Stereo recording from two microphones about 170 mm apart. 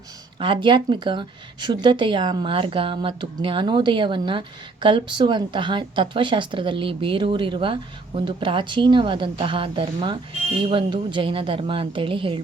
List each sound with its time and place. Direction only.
0.3 s a woman's voice: 30° right (ahead or behind)